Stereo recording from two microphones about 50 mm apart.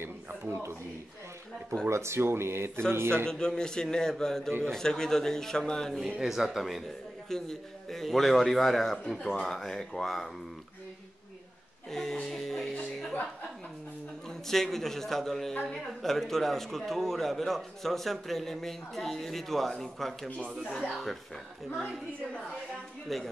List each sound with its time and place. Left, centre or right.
0.0 s a sound: right
0.5 s speech: right
1.9 s speech: right
3.3 s a man's voice: centre
5.9 s speech: centre
7.2 s a man's voice: centre
11.9 s speech: centre
14.5 s a man's voice: centre
20.4 s speech: centre
23.0 s a man's voice: centre